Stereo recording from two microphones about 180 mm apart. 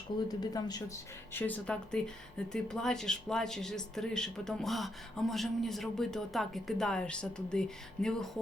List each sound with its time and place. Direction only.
0.3 s speech: 20° left (ahead or behind)
1.3 s speech: 10° left (ahead or behind)